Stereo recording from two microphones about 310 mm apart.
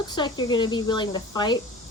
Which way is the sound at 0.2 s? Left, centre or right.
Centre.